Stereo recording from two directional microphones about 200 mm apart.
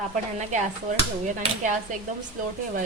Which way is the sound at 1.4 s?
40° right (ahead or behind).